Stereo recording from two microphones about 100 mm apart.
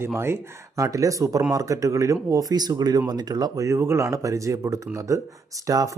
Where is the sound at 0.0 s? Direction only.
25° right (ahead or behind).